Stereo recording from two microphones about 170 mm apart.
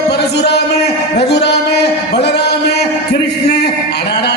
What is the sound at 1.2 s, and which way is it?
Music, 75° left (ahead or behind).